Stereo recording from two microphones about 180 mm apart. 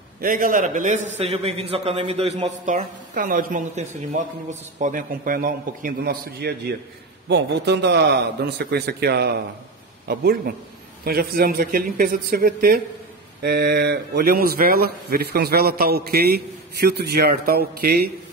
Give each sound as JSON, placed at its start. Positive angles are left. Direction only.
{"t": 0.2, "sound": "a man's voice", "side_deg": -50}
{"t": 7.2, "sound": "a man's voice", "side_deg": -70}